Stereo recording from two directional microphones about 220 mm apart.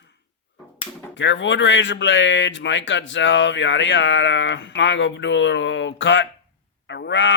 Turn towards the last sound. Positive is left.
turn(degrees=55)  # may be behind; listen again after turning